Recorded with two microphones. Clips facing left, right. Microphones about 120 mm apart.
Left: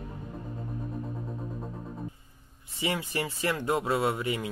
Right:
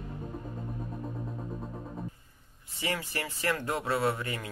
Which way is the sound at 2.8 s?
20° left (ahead or behind).